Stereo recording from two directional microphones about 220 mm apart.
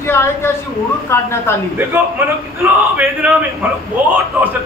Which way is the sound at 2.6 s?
10° right (ahead or behind).